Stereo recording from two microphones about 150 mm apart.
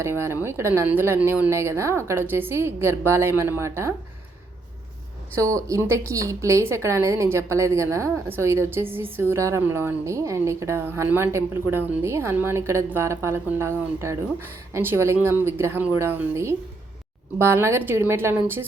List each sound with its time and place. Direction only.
0.0 s a woman's voice: 15° right (ahead or behind)
5.4 s a woman's voice: 20° right (ahead or behind)